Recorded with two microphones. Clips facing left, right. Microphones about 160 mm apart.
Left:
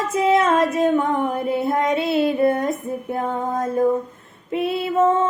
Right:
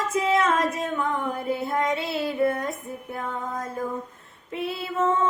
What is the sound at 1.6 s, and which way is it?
Female singing, 20° left (ahead or behind).